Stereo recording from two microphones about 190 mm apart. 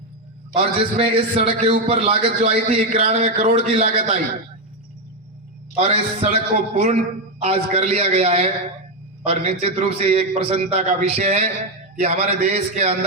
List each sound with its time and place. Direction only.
0.5 s a man's voice: 30° right (ahead or behind); by 4.1 s 45° right (ahead or behind)
5.7 s a man's voice: 35° right (ahead or behind)